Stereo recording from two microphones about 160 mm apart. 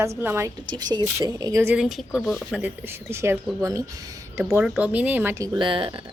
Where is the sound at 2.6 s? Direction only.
15° right (ahead or behind).